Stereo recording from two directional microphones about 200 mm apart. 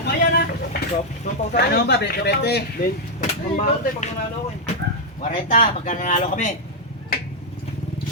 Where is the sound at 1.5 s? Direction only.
55° left (ahead or behind).